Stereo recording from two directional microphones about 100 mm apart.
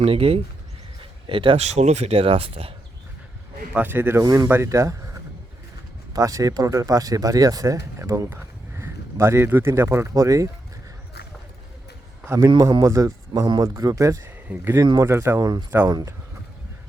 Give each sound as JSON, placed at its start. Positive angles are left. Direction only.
{"t": 0.0, "sound": "speech", "side_deg": -70}
{"t": 1.3, "sound": "speech", "side_deg": -55}
{"t": 3.8, "sound": "speech", "side_deg": -20}
{"t": 4.2, "sound": "speech", "side_deg": -35}
{"t": 6.1, "sound": "speech", "side_deg": -35}
{"t": 12.2, "sound": "a man's voice", "side_deg": -30}
{"t": 12.5, "sound": "speech", "side_deg": -45}
{"t": 14.3, "sound": "speech", "side_deg": -20}